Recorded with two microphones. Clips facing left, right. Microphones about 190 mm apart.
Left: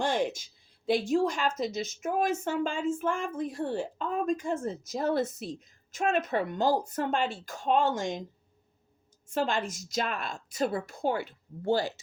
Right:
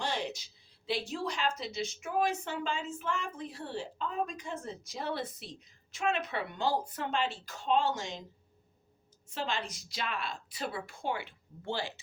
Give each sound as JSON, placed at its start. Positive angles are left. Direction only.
{"t": 0.0, "sound": "a woman's voice", "side_deg": 50}
{"t": 9.3, "sound": "a woman's voice", "side_deg": 50}